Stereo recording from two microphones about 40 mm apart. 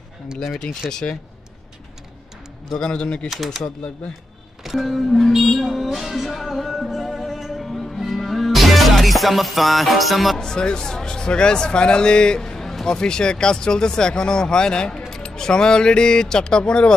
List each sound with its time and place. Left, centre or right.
0.4 s speech: centre
2.8 s speech: left
4.6 s music: centre
10.3 s speech: centre
12.4 s a sound: centre
12.8 s speech: centre